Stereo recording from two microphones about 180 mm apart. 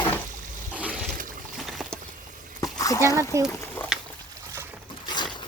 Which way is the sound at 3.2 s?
15° right (ahead or behind).